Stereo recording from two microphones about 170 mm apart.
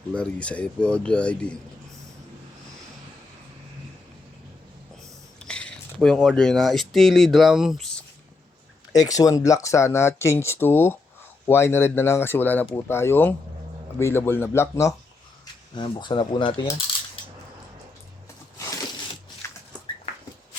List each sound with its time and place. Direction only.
0.1 s speech: 5° left (ahead or behind)
5.4 s speech: 5° left (ahead or behind)
8.9 s speech: 20° left (ahead or behind)
15.7 s speech: 25° left (ahead or behind)
18.5 s a sound: 15° left (ahead or behind)
19.4 s dog: 15° left (ahead or behind)